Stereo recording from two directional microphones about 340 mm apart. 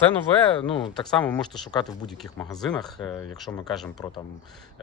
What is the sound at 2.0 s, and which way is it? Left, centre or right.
Speech, centre.